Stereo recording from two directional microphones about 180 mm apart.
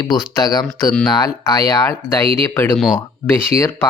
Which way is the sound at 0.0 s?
25° left (ahead or behind).